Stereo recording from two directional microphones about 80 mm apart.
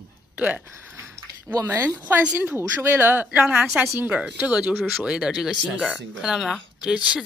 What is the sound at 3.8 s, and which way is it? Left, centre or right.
Speech, right.